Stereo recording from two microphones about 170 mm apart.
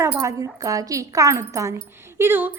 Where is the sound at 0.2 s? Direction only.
20° right (ahead or behind).